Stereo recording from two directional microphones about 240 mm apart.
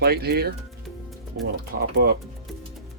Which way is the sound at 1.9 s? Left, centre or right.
Right.